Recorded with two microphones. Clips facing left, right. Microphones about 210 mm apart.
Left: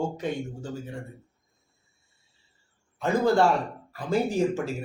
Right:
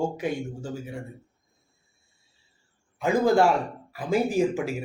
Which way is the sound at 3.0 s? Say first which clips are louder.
Right 1 dB; 15° right (ahead or behind).